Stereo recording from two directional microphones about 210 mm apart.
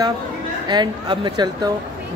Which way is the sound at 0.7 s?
20° right (ahead or behind).